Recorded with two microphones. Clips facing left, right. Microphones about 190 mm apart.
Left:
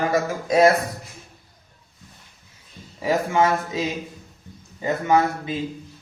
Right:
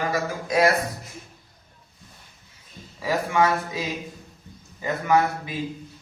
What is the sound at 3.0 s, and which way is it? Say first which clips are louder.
Speech: left 2 dB; 25° left (ahead or behind).